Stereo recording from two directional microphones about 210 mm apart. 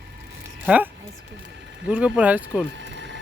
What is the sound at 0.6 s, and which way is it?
Speech, 5° right (ahead or behind).